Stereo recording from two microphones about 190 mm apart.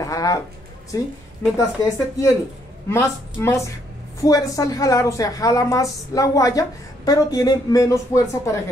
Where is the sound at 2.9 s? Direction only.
15° left (ahead or behind).